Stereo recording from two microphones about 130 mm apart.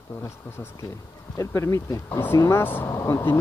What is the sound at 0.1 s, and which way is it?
Speech, 20° left (ahead or behind).